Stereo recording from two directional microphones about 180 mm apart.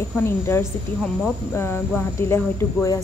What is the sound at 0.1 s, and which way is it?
A woman's voice, 15° left (ahead or behind).